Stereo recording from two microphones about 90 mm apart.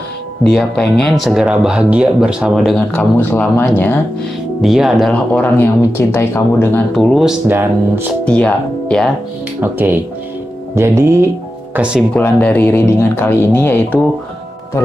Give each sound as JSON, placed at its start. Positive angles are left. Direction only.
{"t": 0.5, "sound": "speech", "side_deg": 5}
{"t": 1.4, "sound": "speech", "side_deg": -10}
{"t": 3.2, "sound": "speech", "side_deg": 25}
{"t": 4.6, "sound": "speech", "side_deg": -5}
{"t": 5.3, "sound": "speech", "side_deg": 20}
{"t": 7.0, "sound": "speech", "side_deg": -5}
{"t": 7.4, "sound": "speech", "side_deg": -20}
{"t": 8.3, "sound": "speech", "side_deg": 15}
{"t": 9.6, "sound": "speech", "side_deg": -25}
{"t": 11.7, "sound": "speech", "side_deg": -10}
{"t": 12.2, "sound": "speech", "side_deg": 20}